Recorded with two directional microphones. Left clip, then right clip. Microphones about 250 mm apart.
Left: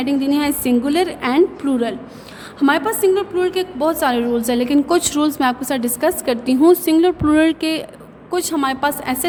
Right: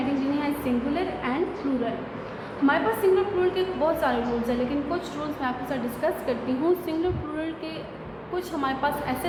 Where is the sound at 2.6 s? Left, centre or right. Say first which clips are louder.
Left 6 dB; left.